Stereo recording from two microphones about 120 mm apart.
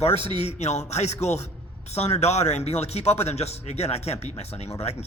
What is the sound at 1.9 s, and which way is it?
A man's voice, 65° left (ahead or behind).